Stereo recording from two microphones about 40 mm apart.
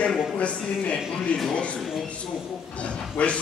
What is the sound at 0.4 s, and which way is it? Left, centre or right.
A man's voice, left.